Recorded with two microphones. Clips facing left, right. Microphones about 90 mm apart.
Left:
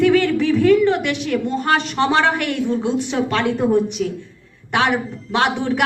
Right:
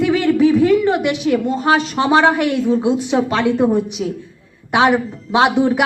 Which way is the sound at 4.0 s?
30° right (ahead or behind).